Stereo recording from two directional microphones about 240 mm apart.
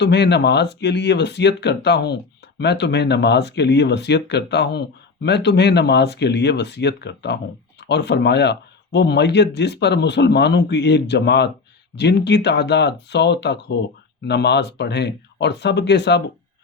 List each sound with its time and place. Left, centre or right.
0.0 s speech: left